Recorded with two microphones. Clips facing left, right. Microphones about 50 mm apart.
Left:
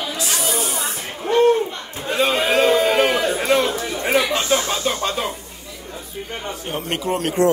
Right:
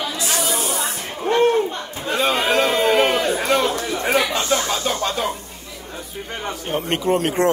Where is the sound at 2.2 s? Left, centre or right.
Right.